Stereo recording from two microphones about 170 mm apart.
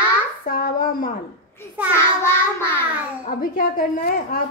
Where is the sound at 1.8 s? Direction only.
10° right (ahead or behind).